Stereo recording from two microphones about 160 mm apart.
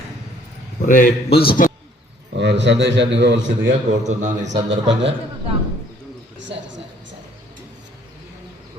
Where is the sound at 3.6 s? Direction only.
50° right (ahead or behind).